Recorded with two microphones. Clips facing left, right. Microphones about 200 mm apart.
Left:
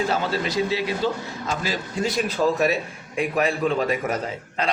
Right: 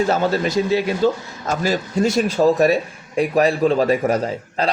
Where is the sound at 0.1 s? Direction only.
45° right (ahead or behind).